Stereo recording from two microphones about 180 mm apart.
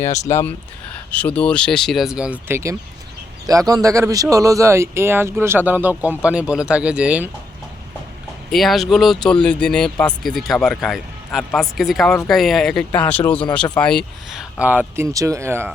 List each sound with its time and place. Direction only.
0.0 s speech: 40° left (ahead or behind)
0.3 s speech: 15° left (ahead or behind); by 7.3 s 5° right (ahead or behind)
8.4 s speech: centre (ahead or behind)
14.6 s speech: 10° right (ahead or behind)